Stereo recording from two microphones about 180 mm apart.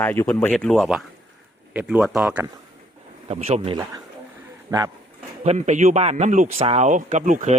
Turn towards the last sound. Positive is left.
turn(degrees=-45)  # may be behind; listen again after turning